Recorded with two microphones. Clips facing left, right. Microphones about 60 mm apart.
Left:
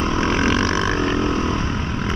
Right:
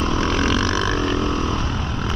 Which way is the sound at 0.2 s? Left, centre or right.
Left.